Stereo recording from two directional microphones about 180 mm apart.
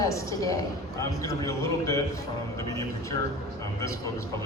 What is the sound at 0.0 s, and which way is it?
A man's voice, 20° left (ahead or behind).